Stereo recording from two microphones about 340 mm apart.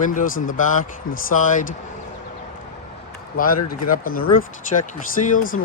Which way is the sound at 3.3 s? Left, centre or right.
Left.